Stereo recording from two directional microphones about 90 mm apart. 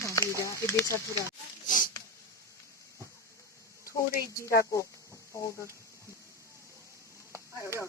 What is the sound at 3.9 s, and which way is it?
Speech, 35° left (ahead or behind).